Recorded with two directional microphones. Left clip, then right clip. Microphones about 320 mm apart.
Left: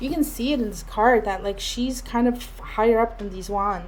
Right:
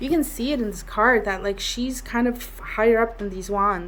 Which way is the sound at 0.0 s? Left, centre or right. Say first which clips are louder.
Right 2 dB; centre.